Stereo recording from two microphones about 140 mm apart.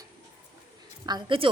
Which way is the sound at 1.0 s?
30° right (ahead or behind).